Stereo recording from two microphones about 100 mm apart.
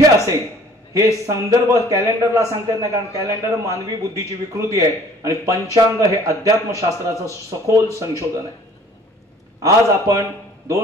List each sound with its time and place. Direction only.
0.9 s a man's voice: 30° right (ahead or behind)
9.6 s a man's voice: 35° right (ahead or behind)